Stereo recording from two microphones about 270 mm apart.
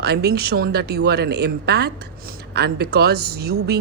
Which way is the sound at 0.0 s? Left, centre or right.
Right.